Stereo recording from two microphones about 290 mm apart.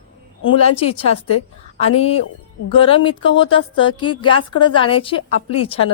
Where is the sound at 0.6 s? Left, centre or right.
Left.